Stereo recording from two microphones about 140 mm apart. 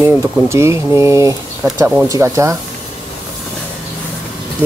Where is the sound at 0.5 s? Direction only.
20° right (ahead or behind).